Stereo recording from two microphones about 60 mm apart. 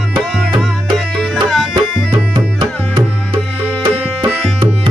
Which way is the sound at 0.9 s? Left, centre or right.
Centre.